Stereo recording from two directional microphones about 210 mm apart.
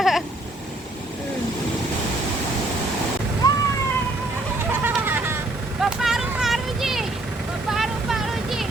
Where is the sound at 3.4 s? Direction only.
15° left (ahead or behind).